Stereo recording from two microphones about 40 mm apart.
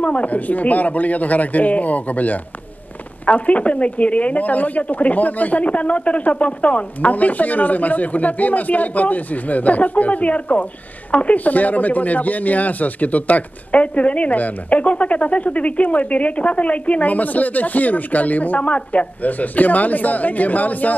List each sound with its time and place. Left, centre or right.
0.0 s a woman's voice: left